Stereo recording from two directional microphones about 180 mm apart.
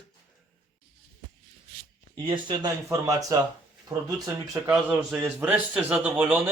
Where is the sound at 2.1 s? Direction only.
25° right (ahead or behind).